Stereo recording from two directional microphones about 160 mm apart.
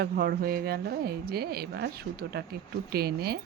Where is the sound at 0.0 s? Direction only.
75° right (ahead or behind).